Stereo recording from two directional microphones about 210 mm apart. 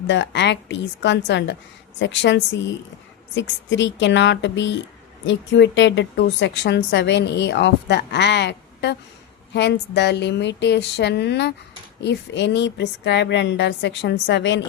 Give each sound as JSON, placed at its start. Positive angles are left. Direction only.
{"t": 0.1, "sound": "a woman's voice", "side_deg": 55}